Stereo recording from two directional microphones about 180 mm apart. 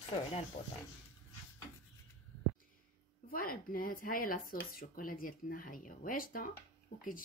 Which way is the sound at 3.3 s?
55° left (ahead or behind).